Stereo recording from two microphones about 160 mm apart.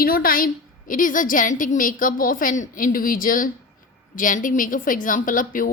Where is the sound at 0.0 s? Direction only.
65° left (ahead or behind).